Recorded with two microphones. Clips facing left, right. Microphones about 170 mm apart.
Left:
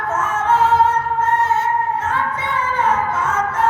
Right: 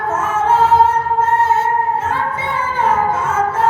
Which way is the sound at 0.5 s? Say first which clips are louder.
Right 2 dB; 30° right (ahead or behind).